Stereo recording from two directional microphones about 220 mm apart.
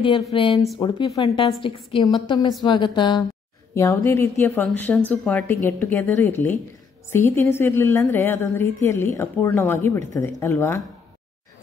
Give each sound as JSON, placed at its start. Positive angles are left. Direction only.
{"t": 0.0, "sound": "a woman's voice", "side_deg": 20}